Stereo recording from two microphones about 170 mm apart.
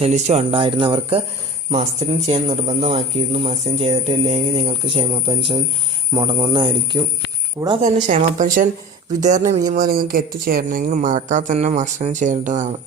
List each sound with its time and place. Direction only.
0.0 s a man's voice: 40° right (ahead or behind)
0.5 s a man's voice: 30° right (ahead or behind)
7.8 s speech: 45° right (ahead or behind)
9.4 s speech: 15° right (ahead or behind)
9.6 s speech: 50° right (ahead or behind)